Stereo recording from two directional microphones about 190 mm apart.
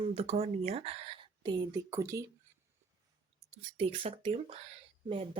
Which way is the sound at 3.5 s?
30° right (ahead or behind).